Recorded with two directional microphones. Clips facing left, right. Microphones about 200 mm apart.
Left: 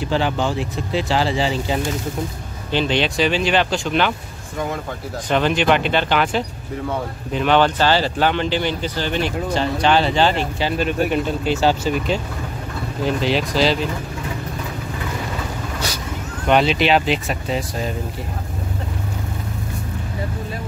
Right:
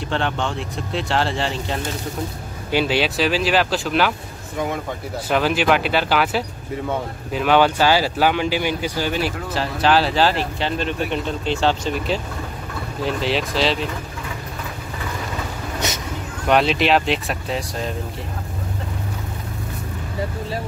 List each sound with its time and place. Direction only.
0.0 s speech: 5° left (ahead or behind)
5.3 s speech: 5° right (ahead or behind)
15.8 s vehicle: 20° right (ahead or behind)
16.4 s speech: centre (ahead or behind)